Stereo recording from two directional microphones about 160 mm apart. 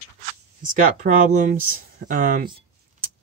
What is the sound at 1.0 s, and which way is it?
Speech, 50° right (ahead or behind).